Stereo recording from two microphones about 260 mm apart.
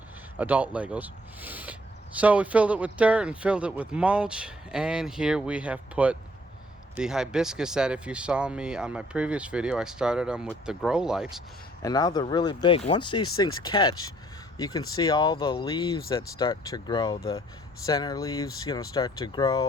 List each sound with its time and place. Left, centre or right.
0.3 s speech: centre
11.8 s speech: centre